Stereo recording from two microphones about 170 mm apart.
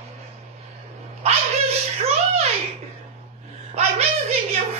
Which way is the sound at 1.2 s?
35° right (ahead or behind).